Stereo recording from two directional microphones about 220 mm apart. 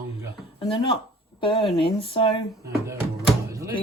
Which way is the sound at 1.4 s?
20° left (ahead or behind).